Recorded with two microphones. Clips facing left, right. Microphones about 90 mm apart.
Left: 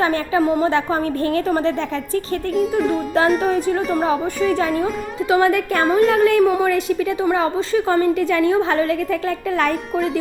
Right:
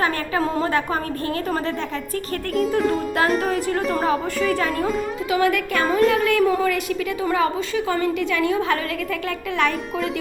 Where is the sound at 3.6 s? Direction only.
20° left (ahead or behind).